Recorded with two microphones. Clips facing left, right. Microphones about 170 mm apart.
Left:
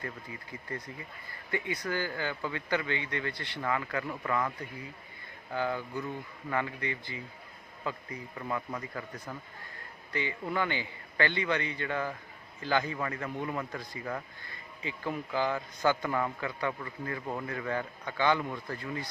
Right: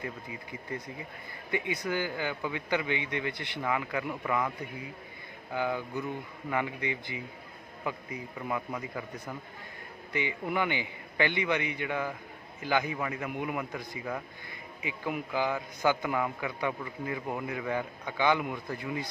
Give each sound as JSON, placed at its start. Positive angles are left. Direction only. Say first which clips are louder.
{"t": 0.0, "sound": "a man's voice", "louder": "right 2 dB", "side_deg": -15}
{"t": 5.5, "sound": "a man's voice", "louder": "right 1 dB", "side_deg": -15}
{"t": 10.1, "sound": "a man's voice", "louder": "right 2 dB", "side_deg": -15}